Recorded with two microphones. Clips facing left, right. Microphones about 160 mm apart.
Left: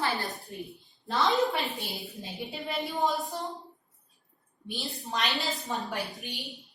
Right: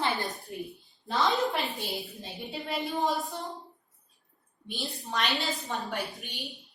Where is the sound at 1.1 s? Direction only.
Centre (ahead or behind).